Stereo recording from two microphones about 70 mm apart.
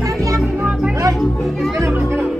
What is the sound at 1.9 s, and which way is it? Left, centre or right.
Music, right.